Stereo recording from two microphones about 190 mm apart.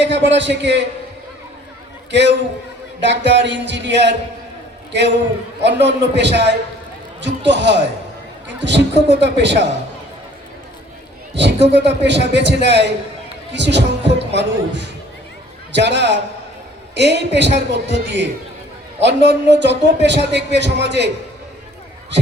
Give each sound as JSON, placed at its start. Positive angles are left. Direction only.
{"t": 0.0, "sound": "speech", "side_deg": -70}
{"t": 2.0, "sound": "a man's voice", "side_deg": -65}
{"t": 11.3, "sound": "a man's voice", "side_deg": -65}